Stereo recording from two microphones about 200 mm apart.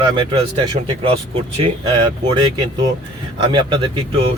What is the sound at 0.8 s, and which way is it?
Speech, 25° right (ahead or behind).